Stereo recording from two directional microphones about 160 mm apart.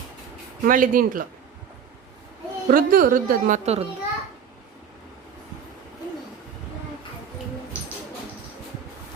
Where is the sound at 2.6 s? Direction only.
65° right (ahead or behind).